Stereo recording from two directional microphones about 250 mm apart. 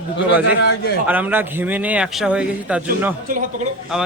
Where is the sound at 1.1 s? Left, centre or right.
Centre.